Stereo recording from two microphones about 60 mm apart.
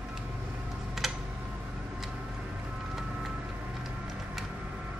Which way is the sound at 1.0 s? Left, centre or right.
Centre.